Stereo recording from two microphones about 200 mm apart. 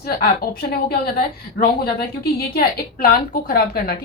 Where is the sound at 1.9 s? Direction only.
50° left (ahead or behind).